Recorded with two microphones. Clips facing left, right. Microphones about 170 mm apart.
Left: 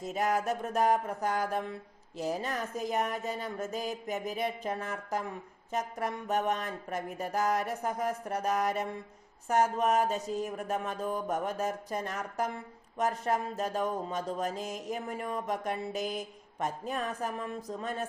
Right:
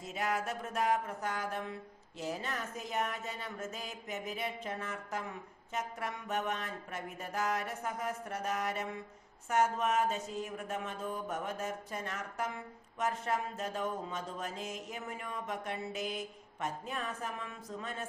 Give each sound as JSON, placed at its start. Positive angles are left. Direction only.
{"t": 0.0, "sound": "speech", "side_deg": 40}